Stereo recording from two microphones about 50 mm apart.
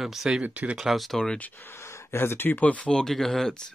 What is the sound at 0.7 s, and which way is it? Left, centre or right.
Speech, centre.